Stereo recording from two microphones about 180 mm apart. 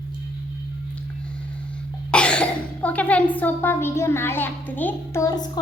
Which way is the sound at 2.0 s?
5° left (ahead or behind).